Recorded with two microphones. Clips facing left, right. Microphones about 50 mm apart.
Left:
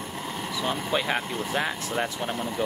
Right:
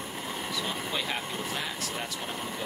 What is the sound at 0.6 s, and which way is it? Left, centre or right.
Vehicle, left.